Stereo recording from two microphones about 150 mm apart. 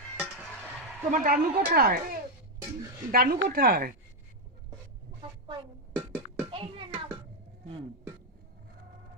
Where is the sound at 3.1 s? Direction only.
85° right.